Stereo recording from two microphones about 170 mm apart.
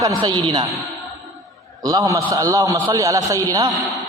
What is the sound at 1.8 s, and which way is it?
A man's voice, 20° right (ahead or behind).